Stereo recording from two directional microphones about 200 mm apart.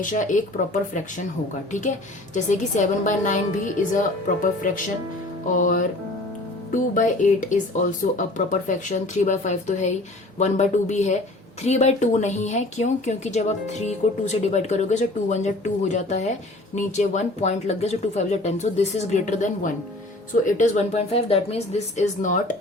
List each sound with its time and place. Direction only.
0.0 s a woman's voice: 40° left (ahead or behind)